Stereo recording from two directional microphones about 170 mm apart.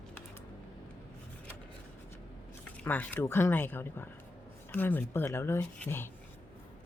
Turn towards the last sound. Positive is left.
turn(degrees=10)  # may be behind; listen again after turning